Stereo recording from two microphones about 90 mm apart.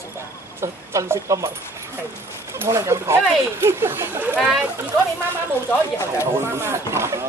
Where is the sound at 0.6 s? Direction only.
30° right (ahead or behind).